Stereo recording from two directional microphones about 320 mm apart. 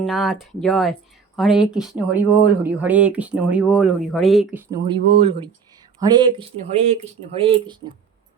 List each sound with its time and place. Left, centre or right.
0.0 s speech: centre
4.7 s speech: centre